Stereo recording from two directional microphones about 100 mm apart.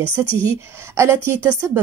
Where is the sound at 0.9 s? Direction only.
25° right (ahead or behind).